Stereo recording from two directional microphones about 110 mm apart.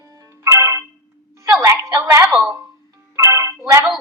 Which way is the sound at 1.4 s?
25° right (ahead or behind).